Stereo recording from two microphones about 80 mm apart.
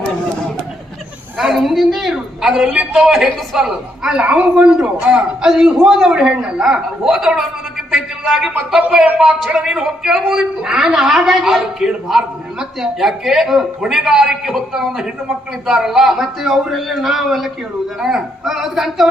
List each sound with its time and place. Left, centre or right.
1.4 s a man's voice: centre
7.9 s a sound: centre
9.0 s a man's voice: centre
9.5 s a man's voice: centre